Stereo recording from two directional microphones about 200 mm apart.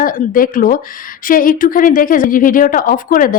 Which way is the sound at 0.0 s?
45° left (ahead or behind).